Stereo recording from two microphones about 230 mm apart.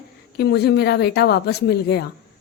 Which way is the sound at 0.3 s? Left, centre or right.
Left.